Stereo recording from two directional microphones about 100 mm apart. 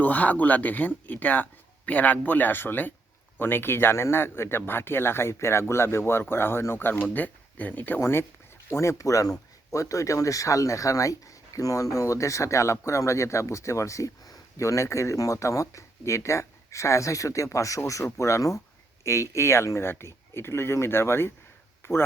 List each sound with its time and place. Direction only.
0.0 s speech: 15° left (ahead or behind)